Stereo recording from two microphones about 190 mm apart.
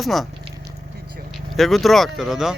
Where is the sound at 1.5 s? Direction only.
Centre (ahead or behind).